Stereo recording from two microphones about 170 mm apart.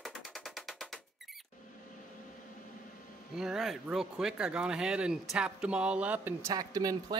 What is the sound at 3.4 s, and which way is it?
Speech, 5° right (ahead or behind).